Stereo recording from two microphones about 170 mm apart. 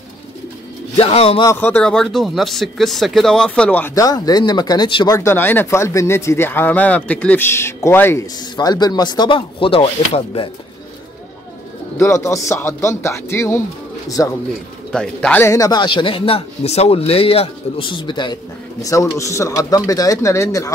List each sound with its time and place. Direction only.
0.9 s a man's voice: 35° left (ahead or behind)
1.4 s speech: 15° left (ahead or behind); by 10.5 s 30° left (ahead or behind)
12.0 s speech: 15° left (ahead or behind)
14.9 s speech: 5° left (ahead or behind)